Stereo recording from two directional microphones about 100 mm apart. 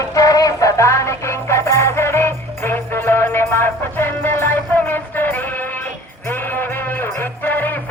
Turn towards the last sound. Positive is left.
turn(degrees=20)  # may be behind; listen again after turning